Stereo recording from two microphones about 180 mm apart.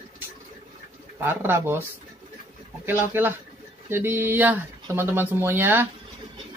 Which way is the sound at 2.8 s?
10° right (ahead or behind).